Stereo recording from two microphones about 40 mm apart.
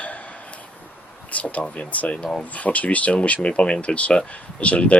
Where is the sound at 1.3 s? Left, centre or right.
Left.